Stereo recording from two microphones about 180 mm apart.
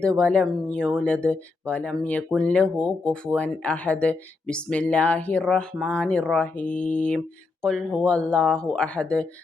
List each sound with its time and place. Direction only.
0.0 s speech: 5° left (ahead or behind)